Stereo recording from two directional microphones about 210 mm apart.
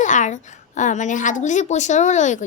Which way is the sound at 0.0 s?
35° left (ahead or behind).